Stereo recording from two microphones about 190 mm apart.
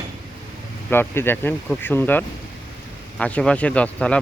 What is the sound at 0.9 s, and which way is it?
Speech, 10° left (ahead or behind).